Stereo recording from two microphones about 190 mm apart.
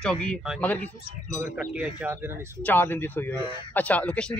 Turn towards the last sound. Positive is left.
turn(degrees=5)  # may be behind; listen again after turning